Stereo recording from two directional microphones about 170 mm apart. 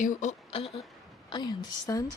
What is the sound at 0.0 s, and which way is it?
A woman's voice, 45° left (ahead or behind).